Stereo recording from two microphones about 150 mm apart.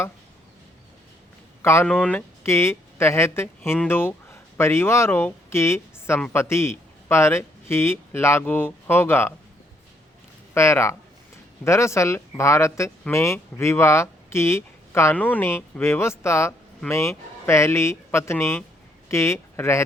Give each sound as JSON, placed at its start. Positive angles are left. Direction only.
{"t": 1.6, "sound": "a man's voice", "side_deg": 15}
{"t": 10.5, "sound": "a man's voice", "side_deg": 20}